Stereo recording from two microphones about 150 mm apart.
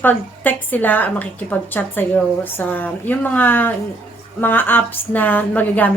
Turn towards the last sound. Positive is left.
turn(degrees=10)  # may be behind; listen again after turning